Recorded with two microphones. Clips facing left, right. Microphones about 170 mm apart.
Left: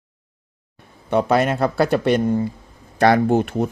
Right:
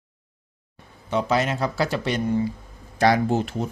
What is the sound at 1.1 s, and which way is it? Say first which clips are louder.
Speech: left 5 dB; 55° left (ahead or behind).